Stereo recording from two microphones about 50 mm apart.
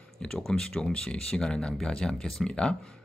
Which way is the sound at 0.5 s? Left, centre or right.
Centre.